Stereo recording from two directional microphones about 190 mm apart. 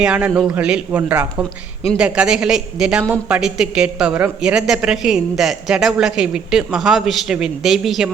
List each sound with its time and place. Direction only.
0.0 s a man's voice: 5° right (ahead or behind)